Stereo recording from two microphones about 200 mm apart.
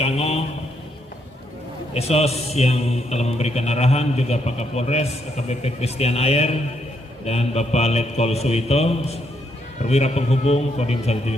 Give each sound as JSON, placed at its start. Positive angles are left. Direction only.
{"t": 0.0, "sound": "a man's voice", "side_deg": 30}
{"t": 1.9, "sound": "a man's voice", "side_deg": 30}